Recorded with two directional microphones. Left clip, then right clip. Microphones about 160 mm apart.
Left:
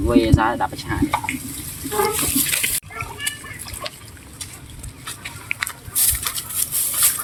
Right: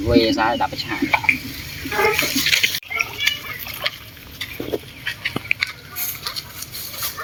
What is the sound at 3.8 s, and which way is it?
Liquid, 90° left.